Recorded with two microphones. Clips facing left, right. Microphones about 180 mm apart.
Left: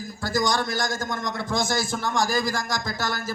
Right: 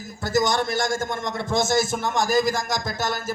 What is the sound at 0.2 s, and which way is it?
A man's voice, 25° right (ahead or behind).